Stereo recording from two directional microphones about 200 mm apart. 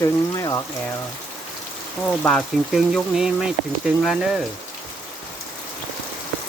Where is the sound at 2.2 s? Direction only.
Centre (ahead or behind).